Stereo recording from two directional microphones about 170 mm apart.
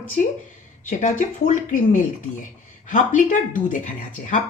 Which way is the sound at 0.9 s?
50° left (ahead or behind).